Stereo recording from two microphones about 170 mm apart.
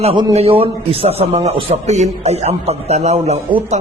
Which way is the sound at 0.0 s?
30° right (ahead or behind).